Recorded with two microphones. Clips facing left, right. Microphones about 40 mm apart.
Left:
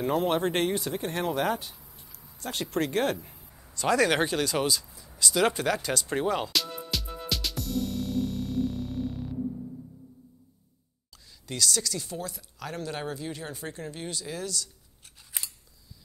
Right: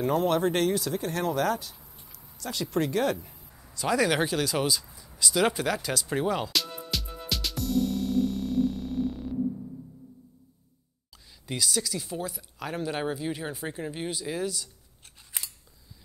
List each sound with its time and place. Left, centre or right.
0.0 s speech: left
1.9 s a sound: right
2.3 s speech: left
3.5 s a sound: centre
3.9 s speech: centre
5.1 s music: centre
11.4 s speech: centre